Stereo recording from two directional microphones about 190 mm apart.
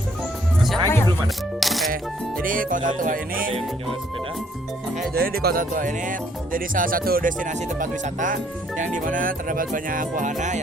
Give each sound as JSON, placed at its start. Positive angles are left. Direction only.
{"t": 0.9, "sound": "music", "side_deg": 15}
{"t": 1.5, "sound": "music", "side_deg": 0}
{"t": 2.4, "sound": "speech", "side_deg": -45}
{"t": 5.1, "sound": "speech", "side_deg": -50}